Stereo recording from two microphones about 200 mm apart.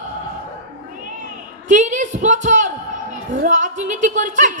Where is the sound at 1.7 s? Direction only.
40° right (ahead or behind).